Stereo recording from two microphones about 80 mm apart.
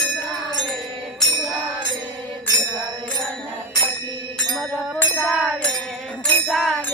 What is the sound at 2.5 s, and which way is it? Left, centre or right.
Music, right.